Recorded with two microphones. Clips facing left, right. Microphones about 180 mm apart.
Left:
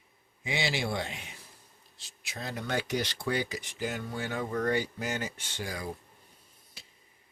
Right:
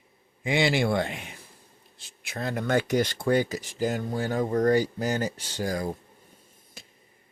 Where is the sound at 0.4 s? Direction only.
55° right (ahead or behind).